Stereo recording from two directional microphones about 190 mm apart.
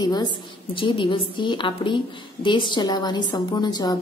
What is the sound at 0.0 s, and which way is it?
A woman's voice, 20° left (ahead or behind).